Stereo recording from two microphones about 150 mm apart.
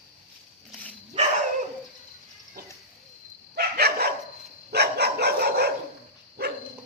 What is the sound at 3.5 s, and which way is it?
Dog, 90° right.